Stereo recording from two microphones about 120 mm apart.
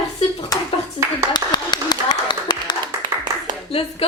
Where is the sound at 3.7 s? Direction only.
60° left (ahead or behind).